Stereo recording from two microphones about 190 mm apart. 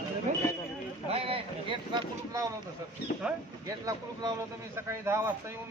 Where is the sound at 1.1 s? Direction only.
30° right (ahead or behind).